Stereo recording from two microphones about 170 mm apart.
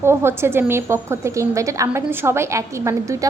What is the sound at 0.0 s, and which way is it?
A woman's voice, 15° right (ahead or behind).